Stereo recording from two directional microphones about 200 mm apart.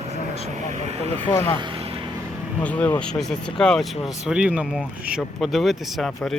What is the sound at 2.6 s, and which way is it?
Speech, 5° left (ahead or behind).